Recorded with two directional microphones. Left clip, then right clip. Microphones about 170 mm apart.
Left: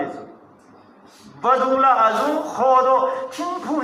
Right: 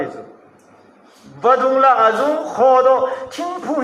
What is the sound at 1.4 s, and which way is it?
A man's voice, 30° right (ahead or behind).